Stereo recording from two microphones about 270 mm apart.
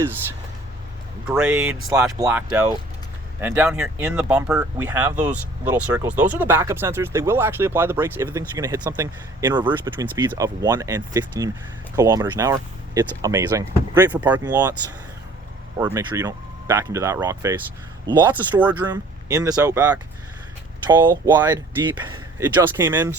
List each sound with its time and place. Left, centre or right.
1.3 s speech: centre
15.8 s speech: centre